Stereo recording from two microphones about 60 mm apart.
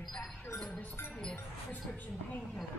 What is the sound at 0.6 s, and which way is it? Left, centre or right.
Music, centre.